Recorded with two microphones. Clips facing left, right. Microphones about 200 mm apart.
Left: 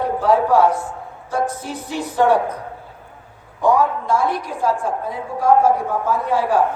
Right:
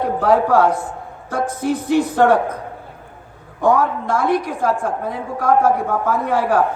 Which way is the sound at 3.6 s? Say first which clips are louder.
Even; 55° right (ahead or behind).